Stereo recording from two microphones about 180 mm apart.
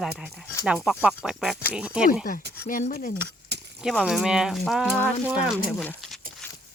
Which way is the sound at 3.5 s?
65° right (ahead or behind).